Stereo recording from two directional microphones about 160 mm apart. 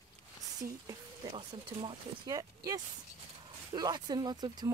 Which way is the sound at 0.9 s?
30° right (ahead or behind).